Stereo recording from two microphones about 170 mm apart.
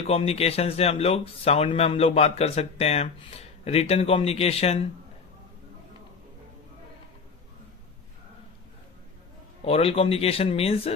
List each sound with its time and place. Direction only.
0.1 s speech: 35° left (ahead or behind)
9.6 s speech: 35° left (ahead or behind)